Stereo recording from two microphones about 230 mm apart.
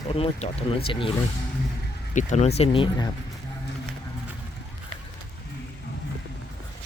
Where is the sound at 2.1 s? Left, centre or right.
Left.